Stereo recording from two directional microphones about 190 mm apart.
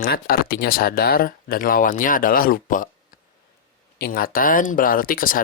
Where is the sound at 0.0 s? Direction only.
50° left (ahead or behind).